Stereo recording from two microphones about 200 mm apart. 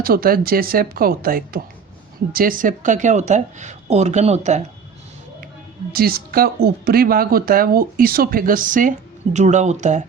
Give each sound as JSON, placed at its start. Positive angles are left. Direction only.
{"t": 0.0, "sound": "speech", "side_deg": -45}
{"t": 5.9, "sound": "speech", "side_deg": -50}